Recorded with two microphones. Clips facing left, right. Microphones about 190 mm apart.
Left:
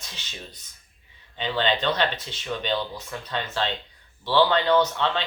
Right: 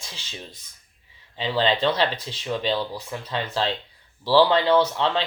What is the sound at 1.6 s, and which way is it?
Speech, 30° right (ahead or behind).